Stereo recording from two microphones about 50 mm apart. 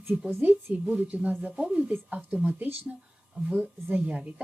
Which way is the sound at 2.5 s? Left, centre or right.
Right.